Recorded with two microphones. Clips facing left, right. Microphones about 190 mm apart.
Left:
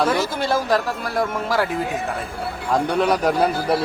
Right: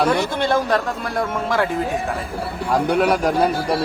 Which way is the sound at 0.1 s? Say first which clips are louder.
Right 2 dB; centre (ahead or behind).